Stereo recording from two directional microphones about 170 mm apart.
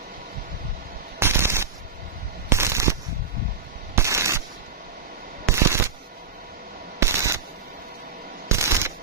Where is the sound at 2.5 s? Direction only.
15° right (ahead or behind).